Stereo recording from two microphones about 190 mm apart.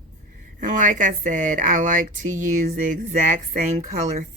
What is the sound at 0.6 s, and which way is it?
A woman's voice, 45° right (ahead or behind).